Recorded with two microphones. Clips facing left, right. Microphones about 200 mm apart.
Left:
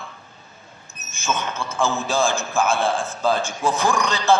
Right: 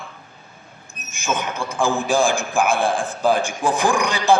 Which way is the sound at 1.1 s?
15° right (ahead or behind).